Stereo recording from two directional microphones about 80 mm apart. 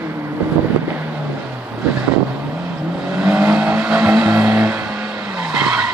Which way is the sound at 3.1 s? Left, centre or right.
Centre.